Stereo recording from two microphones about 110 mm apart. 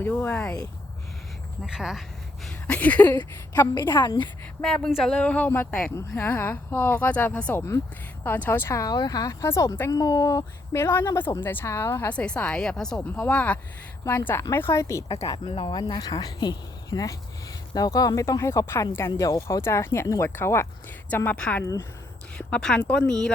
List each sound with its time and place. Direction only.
0.0 s a woman's voice: 15° left (ahead or behind)
1.6 s speech: 5° right (ahead or behind); by 3.2 s 15° left (ahead or behind)
3.5 s speech: 35° left (ahead or behind)
4.6 s a woman's voice: 5° left (ahead or behind); by 15.0 s 25° left (ahead or behind)
15.4 s speech: 50° left (ahead or behind); by 20.7 s 25° left (ahead or behind)
21.3 s a woman's voice: 10° left (ahead or behind)